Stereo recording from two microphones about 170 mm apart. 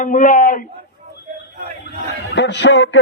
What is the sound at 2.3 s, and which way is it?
Speech, 90° left.